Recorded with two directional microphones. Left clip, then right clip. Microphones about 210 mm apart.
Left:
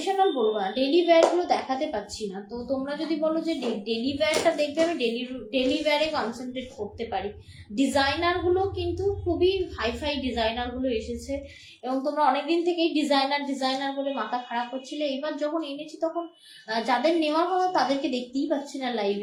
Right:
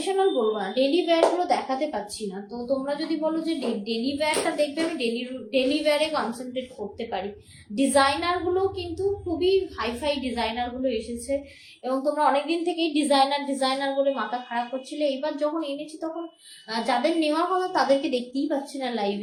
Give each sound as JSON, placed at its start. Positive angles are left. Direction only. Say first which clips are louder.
{"t": 0.0, "sound": "a woman's voice", "louder": "even", "side_deg": -15}